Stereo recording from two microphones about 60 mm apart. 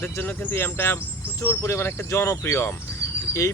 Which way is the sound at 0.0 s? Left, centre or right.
Left.